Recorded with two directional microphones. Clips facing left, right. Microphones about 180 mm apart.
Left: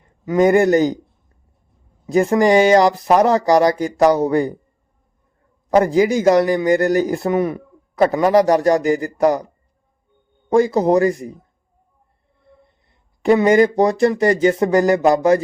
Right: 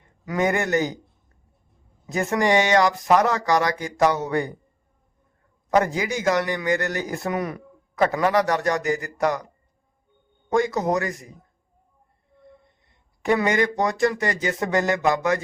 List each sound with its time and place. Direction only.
0.3 s a man's voice: 30° left (ahead or behind)
2.0 s a man's voice: 30° left (ahead or behind)
5.7 s a man's voice: 30° left (ahead or behind)
10.5 s a man's voice: 30° left (ahead or behind)
13.2 s a man's voice: 30° left (ahead or behind)